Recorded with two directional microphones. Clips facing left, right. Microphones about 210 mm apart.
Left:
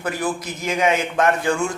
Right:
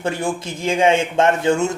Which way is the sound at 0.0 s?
25° right (ahead or behind).